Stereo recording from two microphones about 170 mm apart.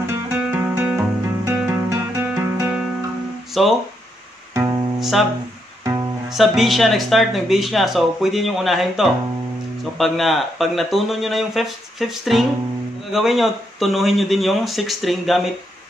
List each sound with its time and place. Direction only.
0.0 s music: 10° right (ahead or behind)
3.6 s speech: centre (ahead or behind)
4.6 s music: 20° right (ahead or behind)
6.3 s speech: centre (ahead or behind)